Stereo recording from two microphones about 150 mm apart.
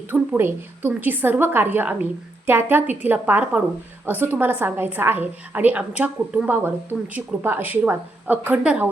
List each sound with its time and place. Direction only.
0.1 s a woman's voice: 15° right (ahead or behind)